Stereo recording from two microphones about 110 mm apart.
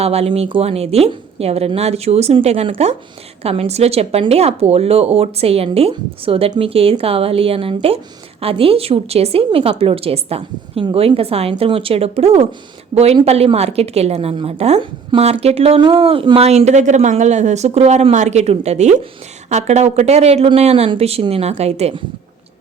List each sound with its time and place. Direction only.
0.0 s a woman's voice: 70° right (ahead or behind)
14.3 s a woman's voice: 50° right (ahead or behind)
15.2 s speech: 70° right (ahead or behind)
15.8 s speech: 50° right (ahead or behind); by 21.9 s 75° right (ahead or behind)